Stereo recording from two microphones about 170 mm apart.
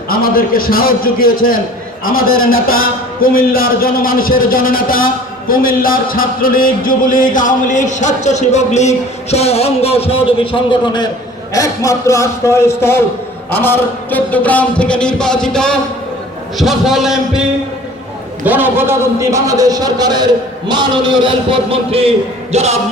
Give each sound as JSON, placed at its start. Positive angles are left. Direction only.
{"t": 0.1, "sound": "a man's voice", "side_deg": 60}
{"t": 5.5, "sound": "music", "side_deg": 55}
{"t": 11.5, "sound": "a man's voice", "side_deg": 20}
{"t": 18.4, "sound": "a man's voice", "side_deg": -10}
{"t": 22.5, "sound": "a sound", "side_deg": -40}